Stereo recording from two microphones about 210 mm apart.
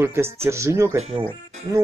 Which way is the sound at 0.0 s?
10° right (ahead or behind).